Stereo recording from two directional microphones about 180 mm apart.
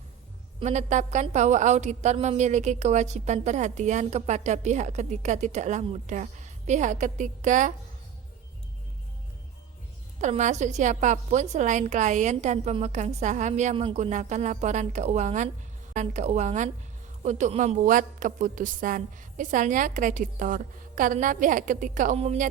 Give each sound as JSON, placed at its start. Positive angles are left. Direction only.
{"t": 0.6, "sound": "a woman's voice", "side_deg": -40}
{"t": 10.2, "sound": "a woman's voice", "side_deg": -45}